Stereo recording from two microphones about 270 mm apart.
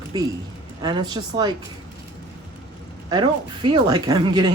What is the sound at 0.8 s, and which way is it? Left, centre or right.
Speech, centre.